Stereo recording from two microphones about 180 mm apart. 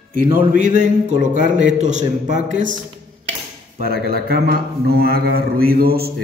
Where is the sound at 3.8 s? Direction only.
60° right (ahead or behind).